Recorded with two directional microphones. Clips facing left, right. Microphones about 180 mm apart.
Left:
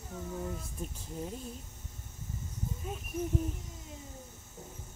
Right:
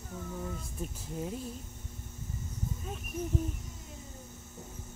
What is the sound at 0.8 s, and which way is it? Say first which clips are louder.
Speech: right 2 dB; centre (ahead or behind).